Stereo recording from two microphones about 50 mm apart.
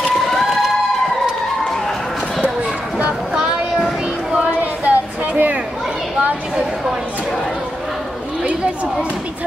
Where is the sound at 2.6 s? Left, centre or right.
Right.